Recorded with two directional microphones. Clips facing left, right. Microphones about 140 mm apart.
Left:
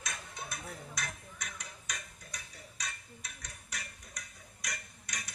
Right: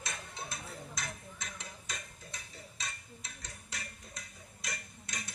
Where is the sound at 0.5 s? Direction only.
25° right (ahead or behind).